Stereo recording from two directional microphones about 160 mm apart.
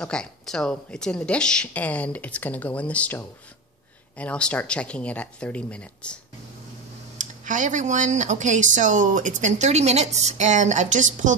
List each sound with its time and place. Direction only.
0.0 s speech: 5° left (ahead or behind)
7.2 s speech: 50° right (ahead or behind)